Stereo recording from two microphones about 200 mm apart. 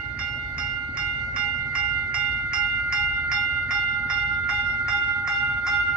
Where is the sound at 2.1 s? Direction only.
5° right (ahead or behind).